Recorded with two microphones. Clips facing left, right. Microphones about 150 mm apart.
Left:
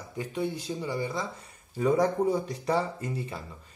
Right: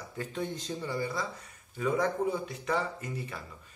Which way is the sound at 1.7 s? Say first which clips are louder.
Left 5 dB; 35° left (ahead or behind).